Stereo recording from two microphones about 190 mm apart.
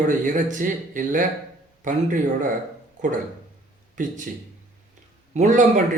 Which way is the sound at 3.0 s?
40° right (ahead or behind).